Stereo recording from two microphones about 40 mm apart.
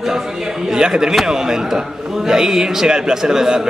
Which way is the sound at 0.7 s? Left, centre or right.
Centre.